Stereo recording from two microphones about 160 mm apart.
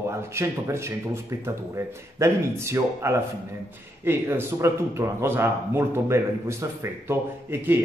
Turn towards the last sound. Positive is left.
turn(degrees=-15)  # may be behind; listen again after turning